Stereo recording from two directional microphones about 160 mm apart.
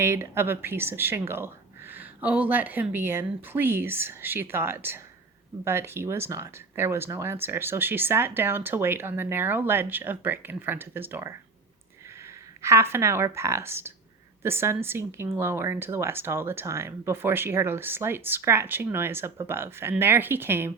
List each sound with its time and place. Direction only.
0.0 s speech: 15° right (ahead or behind)
12.6 s speech: 15° right (ahead or behind)